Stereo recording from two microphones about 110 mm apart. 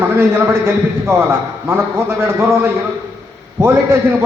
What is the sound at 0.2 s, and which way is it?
A man's voice, 25° right (ahead or behind).